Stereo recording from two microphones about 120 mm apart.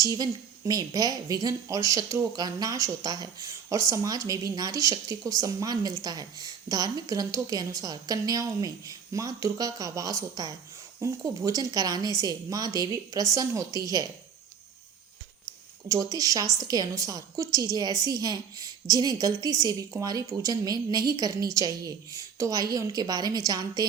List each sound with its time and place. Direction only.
0.0 s a woman's voice: 30° right (ahead or behind)
15.9 s speech: 30° right (ahead or behind)